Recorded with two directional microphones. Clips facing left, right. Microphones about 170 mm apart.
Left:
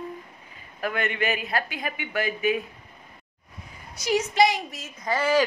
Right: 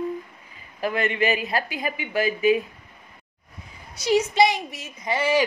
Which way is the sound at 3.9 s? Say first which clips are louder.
Right 3 dB; 30° right (ahead or behind).